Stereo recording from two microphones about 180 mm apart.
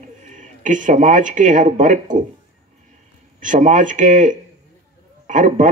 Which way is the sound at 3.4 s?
45° right (ahead or behind).